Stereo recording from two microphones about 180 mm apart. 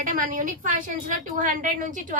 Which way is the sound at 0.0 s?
50° right (ahead or behind).